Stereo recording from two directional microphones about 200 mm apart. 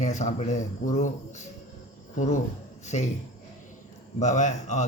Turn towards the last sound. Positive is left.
turn(degrees=35)  # may be behind; listen again after turning